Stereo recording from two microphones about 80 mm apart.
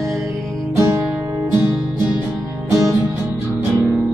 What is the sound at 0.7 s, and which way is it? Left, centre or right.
Music, right.